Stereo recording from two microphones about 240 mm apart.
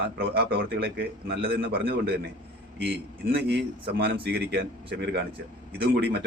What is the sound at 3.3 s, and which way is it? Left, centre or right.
Speech, right.